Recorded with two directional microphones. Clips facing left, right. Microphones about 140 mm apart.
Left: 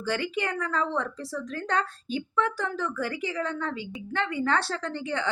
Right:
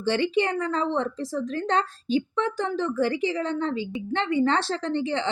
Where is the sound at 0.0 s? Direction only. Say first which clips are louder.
Right 6 dB; 25° right (ahead or behind).